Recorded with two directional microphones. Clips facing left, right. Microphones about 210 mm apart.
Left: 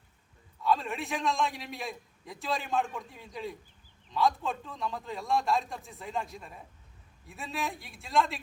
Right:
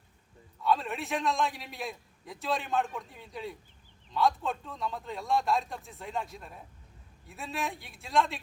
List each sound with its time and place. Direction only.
0.6 s a man's voice: centre (ahead or behind)